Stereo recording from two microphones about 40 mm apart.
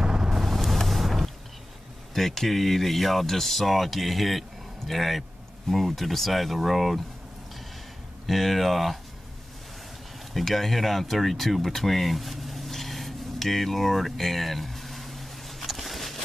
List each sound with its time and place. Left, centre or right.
0.0 s vehicle: centre
0.4 s boat: centre
2.1 s speech: centre
8.3 s speech: centre
10.3 s a sound: centre